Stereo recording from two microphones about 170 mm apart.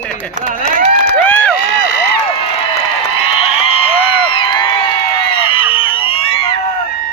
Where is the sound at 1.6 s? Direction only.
70° left (ahead or behind).